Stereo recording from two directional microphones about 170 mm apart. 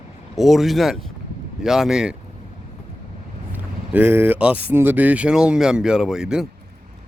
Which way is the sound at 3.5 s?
10° right (ahead or behind).